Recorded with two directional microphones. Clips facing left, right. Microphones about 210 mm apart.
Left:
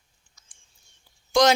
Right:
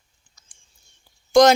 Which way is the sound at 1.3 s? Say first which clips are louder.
Right 6 dB; 45° right (ahead or behind).